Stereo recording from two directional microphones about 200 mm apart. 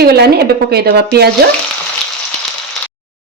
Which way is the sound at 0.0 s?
55° right (ahead or behind).